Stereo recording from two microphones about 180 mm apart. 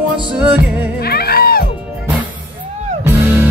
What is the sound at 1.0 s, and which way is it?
Music, 60° left (ahead or behind).